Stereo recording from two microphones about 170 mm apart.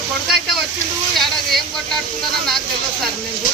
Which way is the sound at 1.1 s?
Centre (ahead or behind).